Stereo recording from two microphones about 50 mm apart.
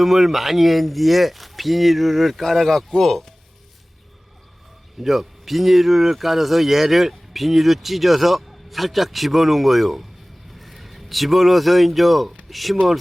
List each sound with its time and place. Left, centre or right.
0.0 s a man's voice: centre
4.9 s a man's voice: centre